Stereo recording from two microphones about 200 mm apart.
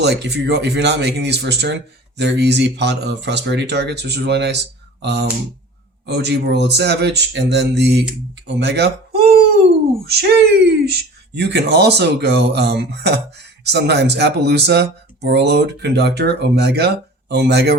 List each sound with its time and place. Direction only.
0.0 s speech: 55° right (ahead or behind)